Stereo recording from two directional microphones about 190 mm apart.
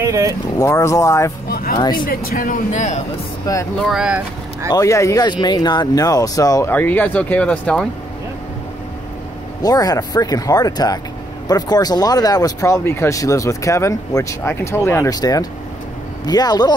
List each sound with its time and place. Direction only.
0.0 s speech: 15° right (ahead or behind)
0.6 s speech: 15° left (ahead or behind)
1.5 s speech: 55° left (ahead or behind)
1.8 s speech: 20° left (ahead or behind)
2.0 s speech: 50° left (ahead or behind)
3.5 s speech: 20° left (ahead or behind)
3.8 s speech: 5° right (ahead or behind)
4.7 s speech: 15° left (ahead or behind)
9.6 s speech: 20° left (ahead or behind)